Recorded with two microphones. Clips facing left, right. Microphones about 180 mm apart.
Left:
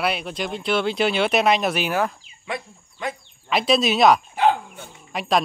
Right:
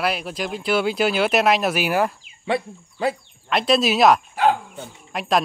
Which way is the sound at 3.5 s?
Centre (ahead or behind).